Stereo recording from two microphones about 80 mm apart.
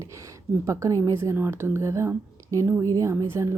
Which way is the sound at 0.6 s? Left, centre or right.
Right.